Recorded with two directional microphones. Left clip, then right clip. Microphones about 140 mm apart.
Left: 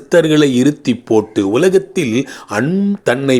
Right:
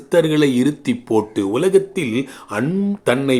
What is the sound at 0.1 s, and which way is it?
Speech, 30° left (ahead or behind).